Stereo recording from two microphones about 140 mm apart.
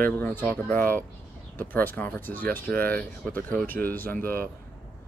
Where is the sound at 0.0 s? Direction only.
15° left (ahead or behind).